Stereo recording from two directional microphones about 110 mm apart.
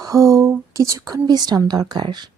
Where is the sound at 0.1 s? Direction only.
30° right (ahead or behind).